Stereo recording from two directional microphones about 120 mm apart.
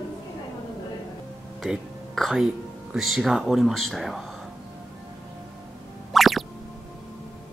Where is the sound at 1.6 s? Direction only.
Centre (ahead or behind).